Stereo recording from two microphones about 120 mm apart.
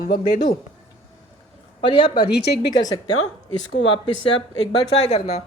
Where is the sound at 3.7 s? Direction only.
50° left (ahead or behind); by 5.4 s 65° left (ahead or behind).